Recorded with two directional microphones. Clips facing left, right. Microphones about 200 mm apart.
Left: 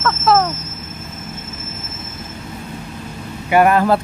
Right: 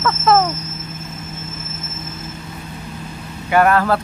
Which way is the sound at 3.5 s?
15° left (ahead or behind).